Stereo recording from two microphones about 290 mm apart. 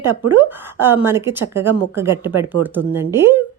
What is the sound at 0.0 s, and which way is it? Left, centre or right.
Speech, centre.